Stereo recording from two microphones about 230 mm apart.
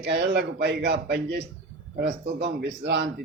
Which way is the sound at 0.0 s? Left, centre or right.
Right.